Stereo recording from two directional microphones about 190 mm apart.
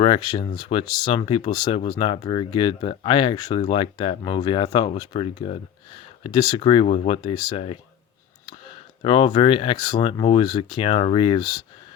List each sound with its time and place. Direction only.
0.0 s speech: 25° left (ahead or behind)
9.0 s speech: 30° left (ahead or behind)